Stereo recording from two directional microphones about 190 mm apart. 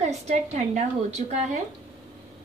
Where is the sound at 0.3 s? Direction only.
35° right (ahead or behind).